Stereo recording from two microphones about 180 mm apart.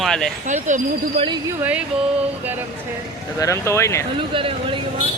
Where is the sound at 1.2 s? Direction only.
25° right (ahead or behind).